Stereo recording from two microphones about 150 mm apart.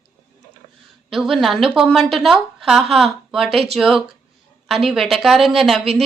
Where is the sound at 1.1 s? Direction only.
Centre (ahead or behind).